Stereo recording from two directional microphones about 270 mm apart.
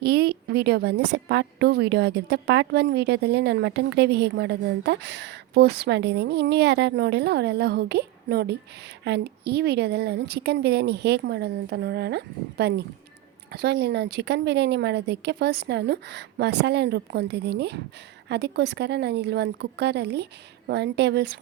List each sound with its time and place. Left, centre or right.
0.0 s a woman's voice: right